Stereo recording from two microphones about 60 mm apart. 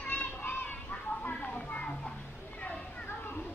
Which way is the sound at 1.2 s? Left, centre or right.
Left.